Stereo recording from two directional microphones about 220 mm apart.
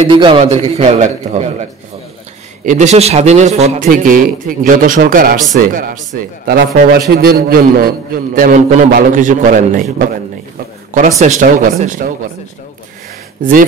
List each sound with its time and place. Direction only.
0.0 s a man's voice: 20° right (ahead or behind)
13.4 s speech: 40° right (ahead or behind)